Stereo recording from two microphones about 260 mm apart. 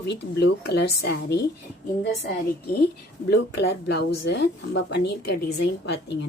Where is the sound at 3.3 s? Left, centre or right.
Left.